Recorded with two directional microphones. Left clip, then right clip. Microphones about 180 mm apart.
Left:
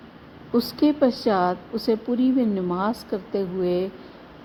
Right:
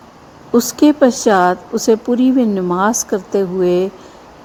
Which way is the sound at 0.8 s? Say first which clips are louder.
Right 9 dB; 40° right (ahead or behind).